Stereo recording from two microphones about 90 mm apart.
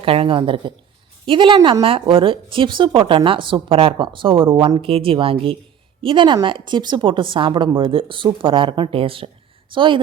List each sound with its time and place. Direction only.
0.0 s speech: 90° right; by 1.7 s 70° right (ahead or behind)
1.8 s speech: 90° right; by 4.7 s 70° right (ahead or behind)
4.8 s speech: 90° right
6.0 s speech: 70° right (ahead or behind); by 9.3 s 85° right
9.7 s speech: 65° right (ahead or behind)